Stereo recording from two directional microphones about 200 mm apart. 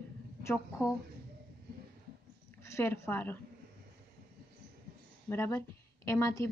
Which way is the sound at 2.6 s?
10° left (ahead or behind).